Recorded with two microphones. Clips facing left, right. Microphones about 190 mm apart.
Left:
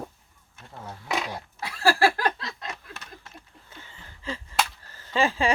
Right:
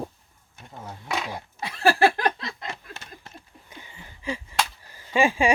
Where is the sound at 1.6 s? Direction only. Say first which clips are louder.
Right 2 dB; 20° right (ahead or behind).